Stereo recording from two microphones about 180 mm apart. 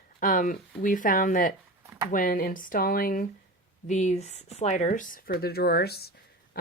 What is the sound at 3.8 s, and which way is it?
Speech, 40° left (ahead or behind).